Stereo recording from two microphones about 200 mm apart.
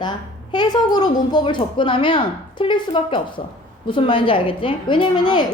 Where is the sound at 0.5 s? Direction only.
20° left (ahead or behind).